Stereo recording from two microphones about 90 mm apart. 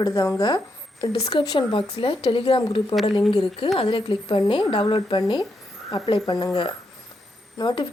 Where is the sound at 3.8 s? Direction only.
70° left (ahead or behind).